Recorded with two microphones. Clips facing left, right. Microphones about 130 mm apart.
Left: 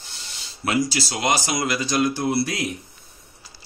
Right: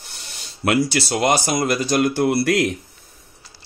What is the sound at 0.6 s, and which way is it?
Speech, 65° right (ahead or behind).